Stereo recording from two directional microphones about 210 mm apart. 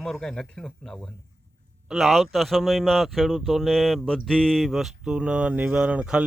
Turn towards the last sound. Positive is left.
turn(degrees=-5)  # may be behind; listen again after turning